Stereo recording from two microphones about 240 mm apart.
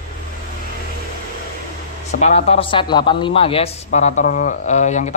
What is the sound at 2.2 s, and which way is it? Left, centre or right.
A man's voice, left.